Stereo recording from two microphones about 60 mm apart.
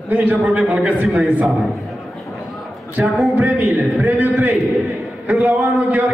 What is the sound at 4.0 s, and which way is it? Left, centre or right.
Speech, right.